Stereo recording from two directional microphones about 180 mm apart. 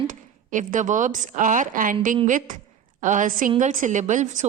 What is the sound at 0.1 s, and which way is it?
Speech, 45° right (ahead or behind).